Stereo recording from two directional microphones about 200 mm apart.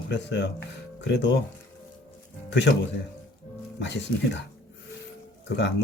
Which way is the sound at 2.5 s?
60° left (ahead or behind).